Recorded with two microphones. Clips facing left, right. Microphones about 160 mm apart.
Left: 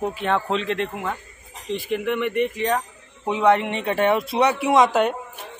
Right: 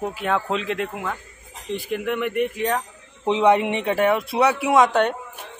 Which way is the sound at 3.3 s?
20° right (ahead or behind).